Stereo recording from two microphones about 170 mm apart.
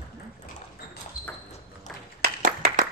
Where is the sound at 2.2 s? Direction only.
65° right (ahead or behind).